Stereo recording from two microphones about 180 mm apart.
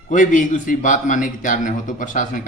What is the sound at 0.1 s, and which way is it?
Speech, 45° left (ahead or behind).